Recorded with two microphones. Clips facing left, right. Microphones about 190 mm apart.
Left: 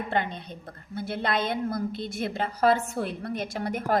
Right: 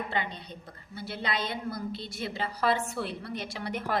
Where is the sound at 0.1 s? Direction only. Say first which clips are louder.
Left 5 dB; 50° left (ahead or behind).